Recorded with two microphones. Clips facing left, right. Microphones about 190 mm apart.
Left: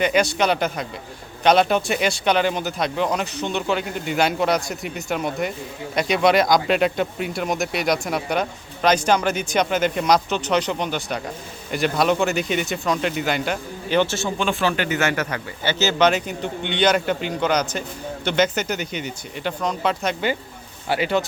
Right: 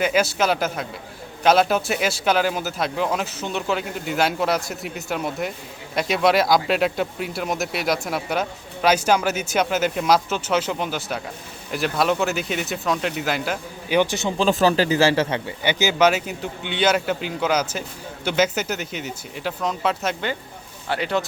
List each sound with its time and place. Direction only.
0.0 s speech: 5° right (ahead or behind)
14.0 s speech: 15° right (ahead or behind)
14.3 s a man's voice: 35° right (ahead or behind)
15.6 s speech: 15° right (ahead or behind); by 21.2 s 5° left (ahead or behind)